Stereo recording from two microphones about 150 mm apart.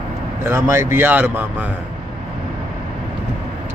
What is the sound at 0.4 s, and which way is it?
Speech, 20° right (ahead or behind).